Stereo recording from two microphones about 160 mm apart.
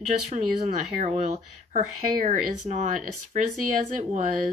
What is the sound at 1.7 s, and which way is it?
Speech, 55° right (ahead or behind).